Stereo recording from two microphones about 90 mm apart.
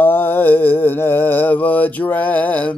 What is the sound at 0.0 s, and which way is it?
Mantra, 25° left (ahead or behind).